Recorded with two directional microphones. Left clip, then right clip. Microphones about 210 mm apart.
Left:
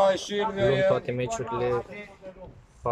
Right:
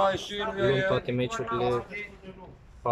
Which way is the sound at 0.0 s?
25° left (ahead or behind).